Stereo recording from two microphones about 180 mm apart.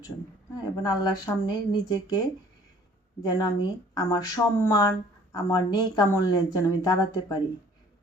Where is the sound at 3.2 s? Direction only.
20° left (ahead or behind).